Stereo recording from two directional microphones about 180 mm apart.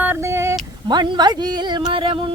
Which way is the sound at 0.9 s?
25° right (ahead or behind).